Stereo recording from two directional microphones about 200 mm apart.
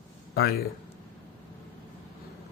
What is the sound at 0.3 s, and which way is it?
Speech, 50° left (ahead or behind).